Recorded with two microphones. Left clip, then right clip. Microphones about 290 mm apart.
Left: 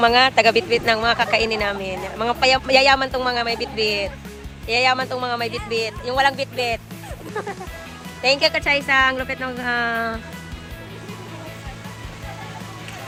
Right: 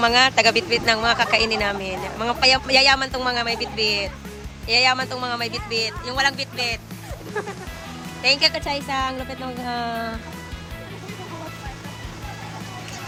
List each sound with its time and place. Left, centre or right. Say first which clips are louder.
0.0 s speech: left 2 dB; centre
7.3 s music: even; left
8.2 s speech: left 1 dB; centre